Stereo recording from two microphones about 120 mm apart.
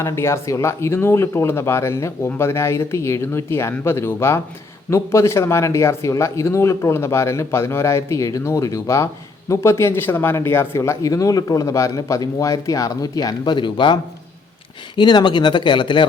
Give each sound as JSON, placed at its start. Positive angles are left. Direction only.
{"t": 0.0, "sound": "speech", "side_deg": 20}